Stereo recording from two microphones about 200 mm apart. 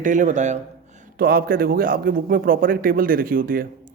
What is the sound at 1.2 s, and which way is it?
Speech, 50° right (ahead or behind).